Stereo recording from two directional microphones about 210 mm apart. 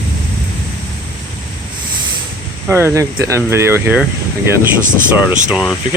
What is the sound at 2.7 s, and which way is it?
Speech, 10° right (ahead or behind).